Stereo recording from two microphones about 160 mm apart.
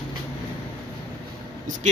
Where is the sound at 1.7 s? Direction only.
50° right (ahead or behind).